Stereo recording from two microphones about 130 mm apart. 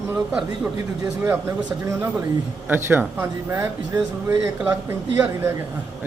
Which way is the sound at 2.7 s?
15° right (ahead or behind).